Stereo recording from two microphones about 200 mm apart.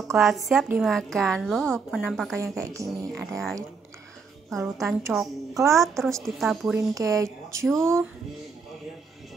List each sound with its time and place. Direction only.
0.1 s a woman's voice: centre (ahead or behind)
2.6 s speech: 15° right (ahead or behind)
3.1 s a woman's voice: centre (ahead or behind)
6.9 s speech: 15° right (ahead or behind)
7.6 s a woman's voice: centre (ahead or behind)